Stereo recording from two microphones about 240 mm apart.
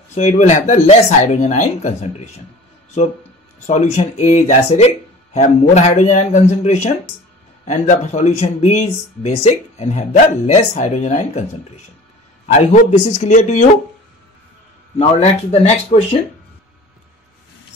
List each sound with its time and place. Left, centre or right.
0.1 s speech: left
3.6 s speech: left
15.0 s speech: left